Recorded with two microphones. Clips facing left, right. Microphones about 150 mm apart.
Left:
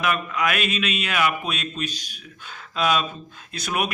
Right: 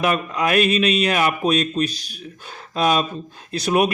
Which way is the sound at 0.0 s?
35° right (ahead or behind).